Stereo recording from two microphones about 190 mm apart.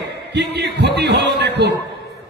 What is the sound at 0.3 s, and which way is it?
A man's voice, 60° right (ahead or behind).